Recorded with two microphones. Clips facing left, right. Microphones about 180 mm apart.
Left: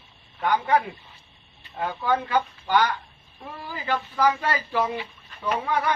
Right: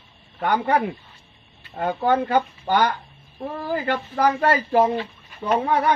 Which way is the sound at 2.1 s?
55° right (ahead or behind).